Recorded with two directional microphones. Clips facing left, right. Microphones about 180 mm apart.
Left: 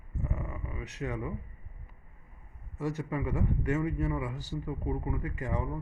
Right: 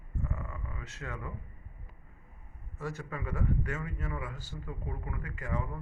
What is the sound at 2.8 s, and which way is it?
A man's voice, 15° left (ahead or behind).